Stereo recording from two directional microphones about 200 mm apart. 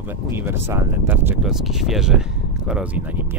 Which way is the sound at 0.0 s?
10° right (ahead or behind).